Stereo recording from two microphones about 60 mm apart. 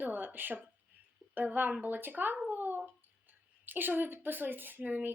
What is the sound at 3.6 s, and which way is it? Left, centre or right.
A woman's voice, right.